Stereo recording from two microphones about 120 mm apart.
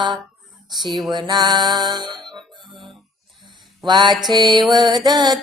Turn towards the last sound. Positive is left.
turn(degrees=-35)  # may be behind; listen again after turning